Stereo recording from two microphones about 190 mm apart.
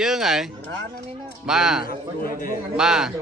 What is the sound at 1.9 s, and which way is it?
Speech, 50° left (ahead or behind).